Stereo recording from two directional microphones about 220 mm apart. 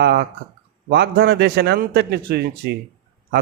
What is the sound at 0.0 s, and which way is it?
A man's voice, 50° right (ahead or behind).